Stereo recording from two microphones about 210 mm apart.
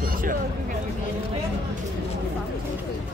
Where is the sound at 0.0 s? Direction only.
40° right (ahead or behind).